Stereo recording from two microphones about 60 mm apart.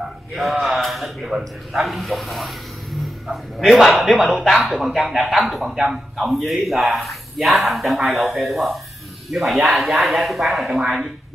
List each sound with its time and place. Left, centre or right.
0.0 s a man's voice: centre